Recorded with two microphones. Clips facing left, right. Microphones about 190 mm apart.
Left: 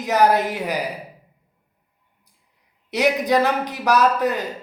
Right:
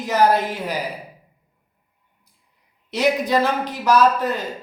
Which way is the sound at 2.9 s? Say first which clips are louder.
Left 1 dB; 15° left (ahead or behind).